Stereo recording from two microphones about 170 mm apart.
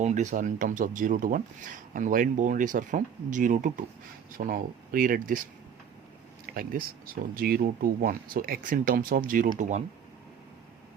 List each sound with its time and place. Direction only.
0.0 s speech: 45° right (ahead or behind)
6.4 s speech: 60° right (ahead or behind)